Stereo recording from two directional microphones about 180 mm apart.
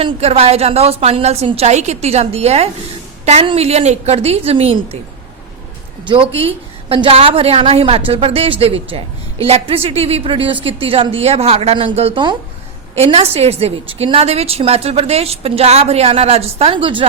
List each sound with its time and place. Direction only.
0.0 s a woman's voice: 35° right (ahead or behind)
6.3 s a woman's voice: 30° right (ahead or behind)